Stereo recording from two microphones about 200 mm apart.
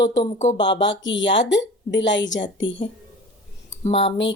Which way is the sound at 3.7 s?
30° left (ahead or behind).